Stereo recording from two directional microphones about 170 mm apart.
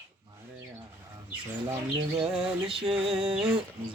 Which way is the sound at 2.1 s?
30° right (ahead or behind).